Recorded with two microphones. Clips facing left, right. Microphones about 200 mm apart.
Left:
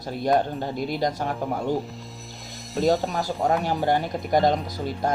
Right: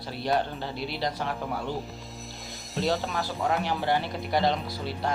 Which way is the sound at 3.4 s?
40° left (ahead or behind).